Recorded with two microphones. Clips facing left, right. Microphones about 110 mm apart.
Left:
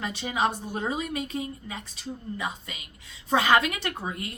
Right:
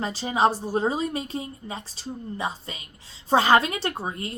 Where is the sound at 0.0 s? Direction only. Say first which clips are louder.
Right 5 dB; 30° right (ahead or behind).